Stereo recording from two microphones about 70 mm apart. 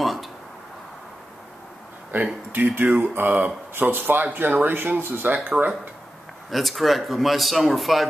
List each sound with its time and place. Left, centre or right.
0.0 s a sound: centre
2.1 s speech: right
6.5 s a man's voice: centre